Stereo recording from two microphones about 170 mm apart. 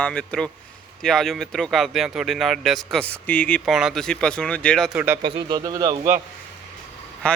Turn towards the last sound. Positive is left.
turn(degrees=5)  # may be behind; listen again after turning